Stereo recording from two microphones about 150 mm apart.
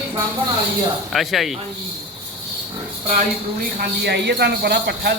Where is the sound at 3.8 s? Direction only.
90° right.